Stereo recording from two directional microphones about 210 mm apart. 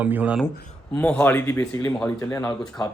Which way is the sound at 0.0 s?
5° right (ahead or behind).